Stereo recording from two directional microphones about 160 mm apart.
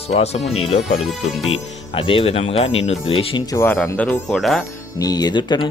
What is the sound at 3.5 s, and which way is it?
Speech, 15° left (ahead or behind).